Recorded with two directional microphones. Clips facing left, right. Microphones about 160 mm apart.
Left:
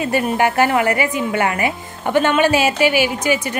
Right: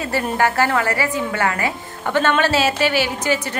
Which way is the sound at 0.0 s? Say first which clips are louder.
Left 3 dB; 15° left (ahead or behind).